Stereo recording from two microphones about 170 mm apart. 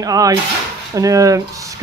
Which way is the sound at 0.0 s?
20° right (ahead or behind).